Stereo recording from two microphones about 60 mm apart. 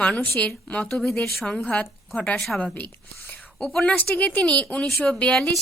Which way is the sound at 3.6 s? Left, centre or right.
Centre.